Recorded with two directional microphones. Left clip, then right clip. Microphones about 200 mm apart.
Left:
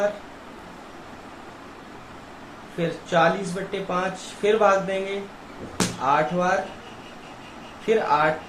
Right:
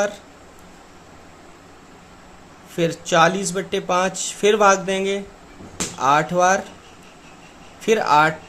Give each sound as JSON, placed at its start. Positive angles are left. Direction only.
{"t": 2.7, "sound": "speech", "side_deg": -55}
{"t": 7.9, "sound": "speech", "side_deg": -55}